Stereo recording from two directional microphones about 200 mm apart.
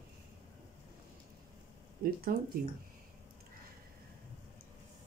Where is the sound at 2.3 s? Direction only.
45° right (ahead or behind).